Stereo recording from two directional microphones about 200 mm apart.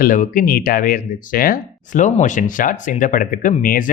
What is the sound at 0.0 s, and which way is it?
Speech, 45° left (ahead or behind).